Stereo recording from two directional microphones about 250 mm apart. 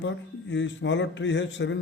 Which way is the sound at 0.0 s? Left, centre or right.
Left.